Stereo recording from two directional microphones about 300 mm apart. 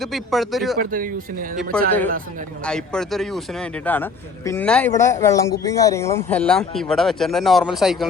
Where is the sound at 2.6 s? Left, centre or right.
Centre.